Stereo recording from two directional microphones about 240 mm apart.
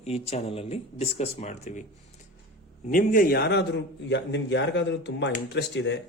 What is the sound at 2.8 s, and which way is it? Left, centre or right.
A man's voice, left.